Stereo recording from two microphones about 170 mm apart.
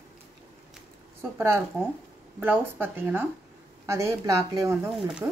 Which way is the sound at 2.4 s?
10° right (ahead or behind).